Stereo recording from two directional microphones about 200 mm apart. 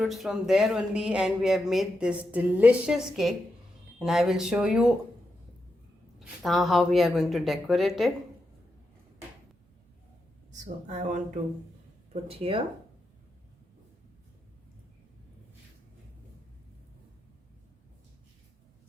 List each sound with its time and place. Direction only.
0.0 s speech: centre (ahead or behind)
6.1 s speech: centre (ahead or behind)
10.8 s speech: 40° right (ahead or behind)